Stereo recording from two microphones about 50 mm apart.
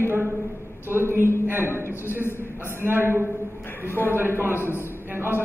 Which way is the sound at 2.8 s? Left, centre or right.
Right.